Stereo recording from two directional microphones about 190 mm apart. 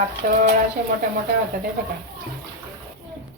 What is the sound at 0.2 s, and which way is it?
Speech, 45° right (ahead or behind).